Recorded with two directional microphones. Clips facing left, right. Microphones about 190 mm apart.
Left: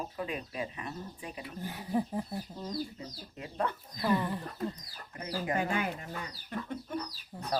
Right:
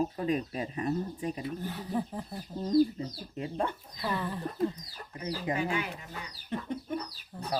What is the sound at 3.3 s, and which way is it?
Speech, 30° right (ahead or behind).